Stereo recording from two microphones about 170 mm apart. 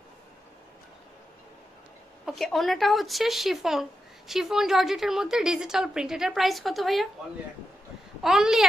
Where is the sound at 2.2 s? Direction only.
Centre (ahead or behind).